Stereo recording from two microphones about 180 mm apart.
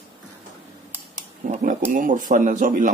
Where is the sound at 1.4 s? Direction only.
45° right (ahead or behind).